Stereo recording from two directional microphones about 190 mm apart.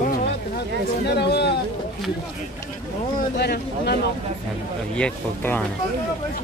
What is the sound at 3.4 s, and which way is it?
Speech, 60° left (ahead or behind).